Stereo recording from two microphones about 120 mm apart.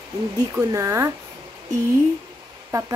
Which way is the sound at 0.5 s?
25° right (ahead or behind).